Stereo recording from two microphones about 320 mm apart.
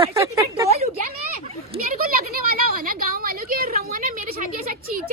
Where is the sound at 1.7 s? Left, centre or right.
Right.